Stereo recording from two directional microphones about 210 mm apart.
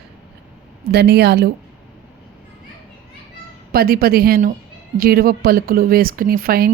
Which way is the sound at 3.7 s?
45° right (ahead or behind).